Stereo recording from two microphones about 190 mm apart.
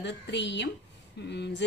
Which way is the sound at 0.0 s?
65° left (ahead or behind).